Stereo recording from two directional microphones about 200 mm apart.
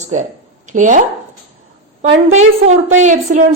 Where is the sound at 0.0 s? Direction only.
40° right (ahead or behind).